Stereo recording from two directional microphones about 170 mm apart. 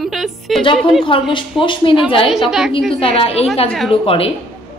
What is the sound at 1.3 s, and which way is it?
Speech, 30° left (ahead or behind).